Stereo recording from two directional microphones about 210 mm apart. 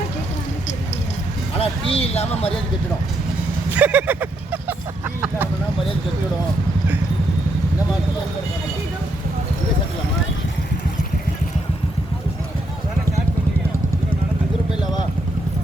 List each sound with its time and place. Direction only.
1.5 s speech: 25° left (ahead or behind)
3.7 s speech: 5° right (ahead or behind)